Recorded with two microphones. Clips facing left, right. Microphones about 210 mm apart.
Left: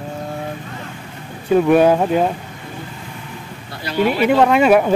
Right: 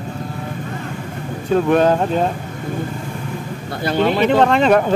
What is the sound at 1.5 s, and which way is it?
Speech, 10° left (ahead or behind).